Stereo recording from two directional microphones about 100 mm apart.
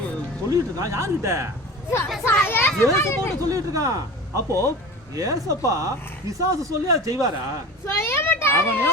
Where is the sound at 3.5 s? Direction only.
35° right (ahead or behind).